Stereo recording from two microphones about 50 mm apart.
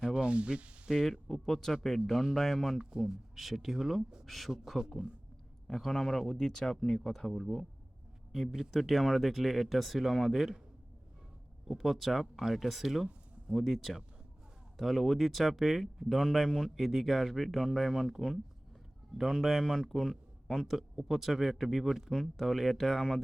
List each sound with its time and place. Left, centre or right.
0.0 s a sound: right
0.9 s speech: centre
1.3 s a man's voice: centre
5.6 s a man's voice: centre
11.7 s a man's voice: centre